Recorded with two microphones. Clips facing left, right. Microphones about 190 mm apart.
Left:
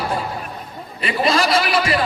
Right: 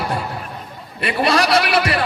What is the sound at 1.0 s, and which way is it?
Speech, 65° right (ahead or behind).